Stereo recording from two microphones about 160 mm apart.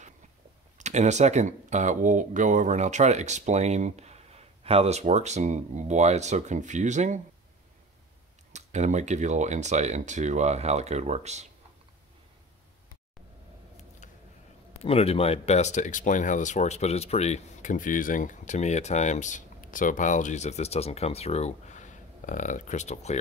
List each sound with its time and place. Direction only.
0.7 s speech: 45° right (ahead or behind)
8.5 s speech: 45° right (ahead or behind)
14.8 s speech: 40° left (ahead or behind)